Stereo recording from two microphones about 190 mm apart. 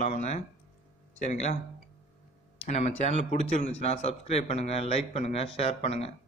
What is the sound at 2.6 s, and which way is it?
Speech, 35° left (ahead or behind).